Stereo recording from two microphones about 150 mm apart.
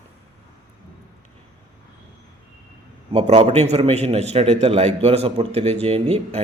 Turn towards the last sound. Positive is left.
turn(degrees=-45)  # may be behind; listen again after turning